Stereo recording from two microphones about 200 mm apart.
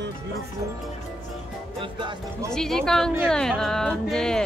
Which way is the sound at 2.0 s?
25° right (ahead or behind).